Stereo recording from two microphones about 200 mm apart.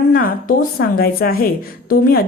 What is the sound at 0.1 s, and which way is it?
Speech, 45° left (ahead or behind).